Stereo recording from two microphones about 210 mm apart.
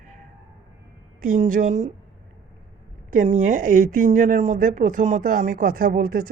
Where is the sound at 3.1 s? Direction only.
40° right (ahead or behind).